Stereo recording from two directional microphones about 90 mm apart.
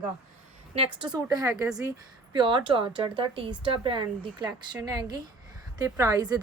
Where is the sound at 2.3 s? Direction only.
65° right (ahead or behind).